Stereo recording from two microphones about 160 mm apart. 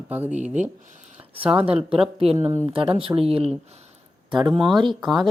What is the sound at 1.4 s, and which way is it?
Speech, 10° right (ahead or behind).